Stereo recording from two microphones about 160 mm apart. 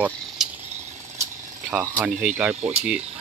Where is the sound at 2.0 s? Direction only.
10° right (ahead or behind).